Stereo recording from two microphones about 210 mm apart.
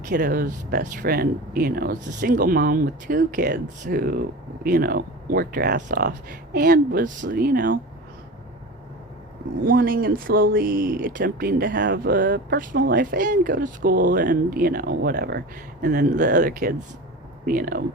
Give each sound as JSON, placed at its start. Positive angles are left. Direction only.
{"t": 0.0, "sound": "speech", "side_deg": -40}
{"t": 9.6, "sound": "speech", "side_deg": -45}